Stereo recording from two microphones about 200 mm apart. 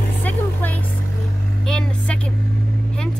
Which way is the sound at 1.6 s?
5° left (ahead or behind).